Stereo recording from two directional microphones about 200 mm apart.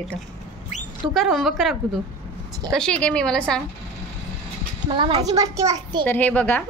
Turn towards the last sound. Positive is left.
turn(degrees=10)  # may be behind; listen again after turning